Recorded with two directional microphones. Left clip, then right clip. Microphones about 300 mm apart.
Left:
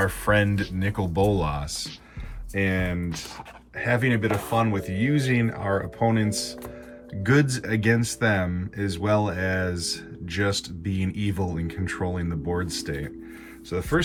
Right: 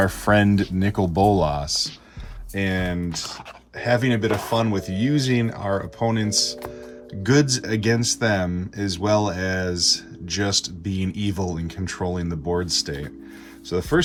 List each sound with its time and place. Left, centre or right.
0.0 s speech: centre